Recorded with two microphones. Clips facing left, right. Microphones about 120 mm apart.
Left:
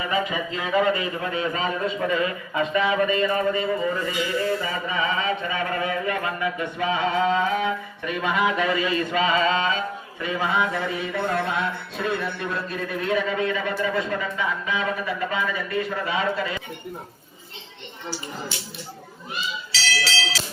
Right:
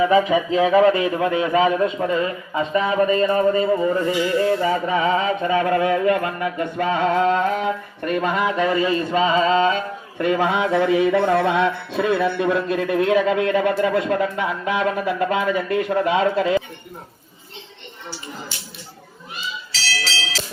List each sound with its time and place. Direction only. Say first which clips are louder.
0.8 s music: right 3 dB; 80° right; by 2.0 s 60° right (ahead or behind)
2.0 s speech: right 3 dB; 35° right (ahead or behind)
10.2 s music: right 5 dB; 65° right (ahead or behind); by 16.6 s 85° right